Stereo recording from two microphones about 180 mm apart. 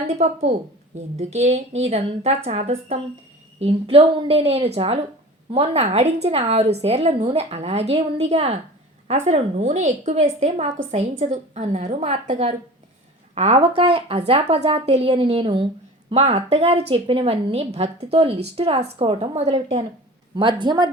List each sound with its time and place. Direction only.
1.2 s a woman's voice: 35° right (ahead or behind)
20.3 s speech: 25° right (ahead or behind)